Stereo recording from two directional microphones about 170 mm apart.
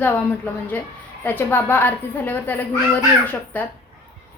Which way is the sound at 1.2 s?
10° left (ahead or behind).